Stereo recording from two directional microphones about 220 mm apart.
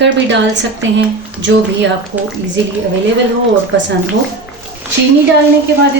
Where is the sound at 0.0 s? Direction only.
55° right (ahead or behind).